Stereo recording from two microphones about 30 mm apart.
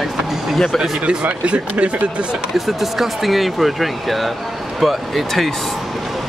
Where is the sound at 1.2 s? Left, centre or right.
Right.